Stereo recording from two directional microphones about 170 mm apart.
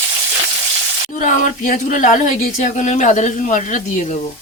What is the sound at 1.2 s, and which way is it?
Speech, 50° left (ahead or behind).